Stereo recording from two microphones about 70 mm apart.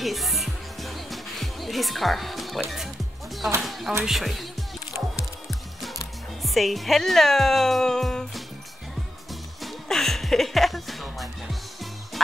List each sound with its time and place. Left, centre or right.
0.0 s music: centre
3.6 s speech: centre
5.5 s music: centre
6.4 s speech: centre
9.3 s music: centre